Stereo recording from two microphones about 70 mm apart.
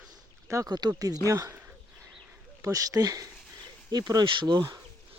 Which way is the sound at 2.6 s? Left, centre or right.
Right.